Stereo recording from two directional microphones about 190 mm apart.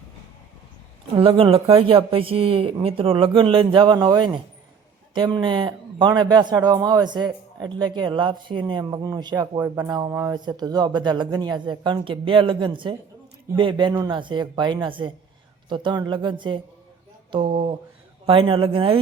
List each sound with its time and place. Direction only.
1.1 s speech: 25° right (ahead or behind)